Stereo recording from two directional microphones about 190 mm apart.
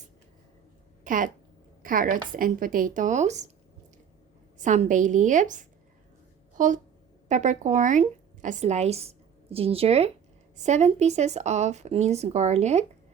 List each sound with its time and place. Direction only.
1.0 s speech: 45° right (ahead or behind)
4.5 s a woman's voice: 40° right (ahead or behind)